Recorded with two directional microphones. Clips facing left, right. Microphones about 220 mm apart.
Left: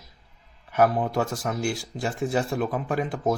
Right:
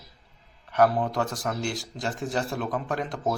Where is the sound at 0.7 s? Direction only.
5° left (ahead or behind).